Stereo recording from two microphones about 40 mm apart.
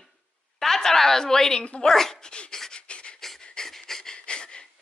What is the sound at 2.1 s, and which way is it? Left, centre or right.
Dog, left.